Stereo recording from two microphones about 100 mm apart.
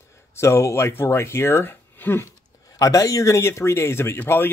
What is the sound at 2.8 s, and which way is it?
Speech, 35° left (ahead or behind).